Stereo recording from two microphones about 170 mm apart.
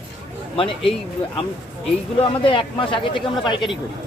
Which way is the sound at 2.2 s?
30° left (ahead or behind).